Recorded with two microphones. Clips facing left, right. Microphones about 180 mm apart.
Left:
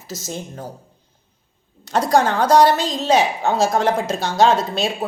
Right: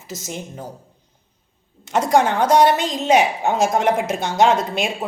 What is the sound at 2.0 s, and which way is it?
Speech, 20° right (ahead or behind).